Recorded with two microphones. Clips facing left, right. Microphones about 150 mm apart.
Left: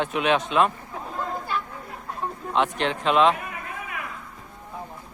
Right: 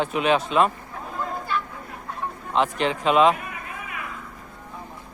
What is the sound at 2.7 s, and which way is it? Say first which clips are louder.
Speech: right 2 dB; 5° right (ahead or behind).